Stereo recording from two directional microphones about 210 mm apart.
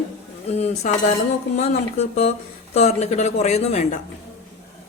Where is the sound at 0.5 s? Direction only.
30° left (ahead or behind).